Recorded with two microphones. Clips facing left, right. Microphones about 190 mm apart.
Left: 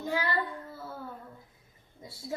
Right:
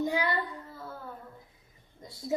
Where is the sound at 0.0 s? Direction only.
15° right (ahead or behind).